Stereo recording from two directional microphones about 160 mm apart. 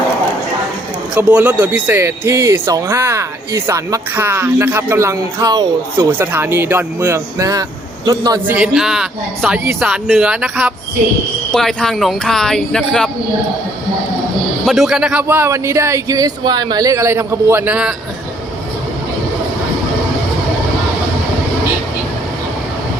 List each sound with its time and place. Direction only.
1.1 s a man's voice: 10° right (ahead or behind)
8.4 s speech: 5° right (ahead or behind)
14.6 s speech: centre (ahead or behind)